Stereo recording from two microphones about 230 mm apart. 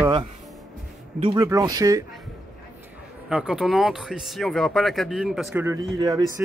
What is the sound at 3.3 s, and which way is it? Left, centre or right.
Speech, centre.